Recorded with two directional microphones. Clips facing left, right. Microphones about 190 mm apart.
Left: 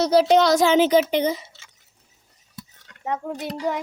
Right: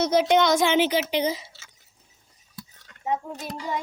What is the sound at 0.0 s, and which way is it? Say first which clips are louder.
Speech: left 3 dB; 35° left (ahead or behind).